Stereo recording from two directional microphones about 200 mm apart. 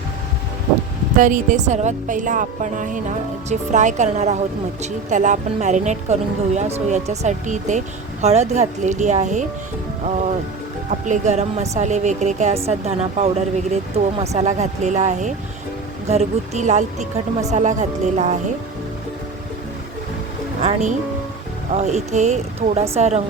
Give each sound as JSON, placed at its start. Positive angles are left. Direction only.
{"t": 1.1, "sound": "a woman's voice", "side_deg": -40}
{"t": 11.0, "sound": "a woman's voice", "side_deg": -35}
{"t": 20.6, "sound": "a woman's voice", "side_deg": -35}